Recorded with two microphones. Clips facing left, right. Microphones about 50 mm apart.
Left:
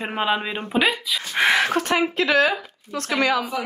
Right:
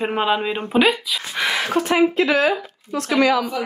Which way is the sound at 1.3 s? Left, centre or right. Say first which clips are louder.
Left 4 dB; left.